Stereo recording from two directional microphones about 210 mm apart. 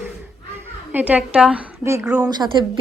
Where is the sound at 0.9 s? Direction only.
5° right (ahead or behind).